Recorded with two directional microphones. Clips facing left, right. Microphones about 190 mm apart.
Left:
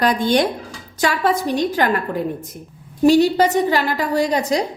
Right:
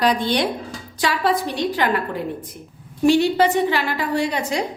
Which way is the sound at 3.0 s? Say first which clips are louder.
Left 2 dB; 40° left (ahead or behind).